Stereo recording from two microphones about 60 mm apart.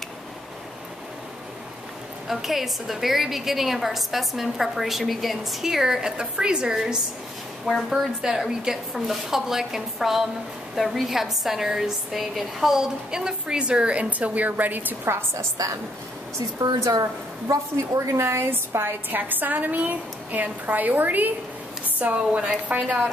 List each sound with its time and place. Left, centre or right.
2.2 s a woman's voice: centre; by 15.0 s right
15.3 s a woman's voice: right
18.5 s a woman's voice: right